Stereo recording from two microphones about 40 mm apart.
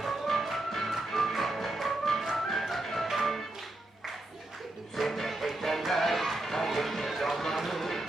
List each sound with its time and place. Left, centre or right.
0.0 s music: centre
4.9 s music: centre